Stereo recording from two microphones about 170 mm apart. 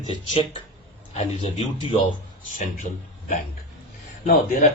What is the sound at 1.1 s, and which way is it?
A man's voice, 40° left (ahead or behind).